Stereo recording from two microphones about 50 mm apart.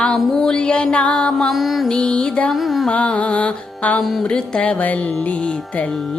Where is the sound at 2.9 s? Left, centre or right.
Left.